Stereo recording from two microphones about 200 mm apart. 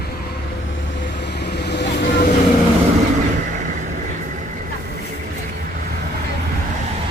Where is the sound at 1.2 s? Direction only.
55° left (ahead or behind).